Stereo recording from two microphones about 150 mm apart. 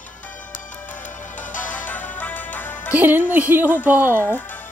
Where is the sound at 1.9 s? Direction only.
10° left (ahead or behind).